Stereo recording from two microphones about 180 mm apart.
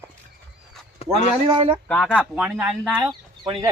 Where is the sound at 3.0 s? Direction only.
25° right (ahead or behind).